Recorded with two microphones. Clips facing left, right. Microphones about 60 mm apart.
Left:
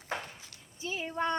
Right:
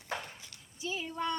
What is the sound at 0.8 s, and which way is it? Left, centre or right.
Female singing, left.